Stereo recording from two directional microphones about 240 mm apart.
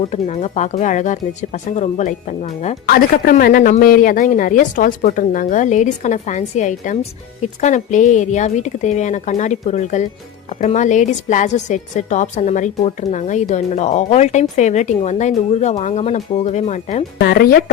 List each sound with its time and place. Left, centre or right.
0.1 s speech: left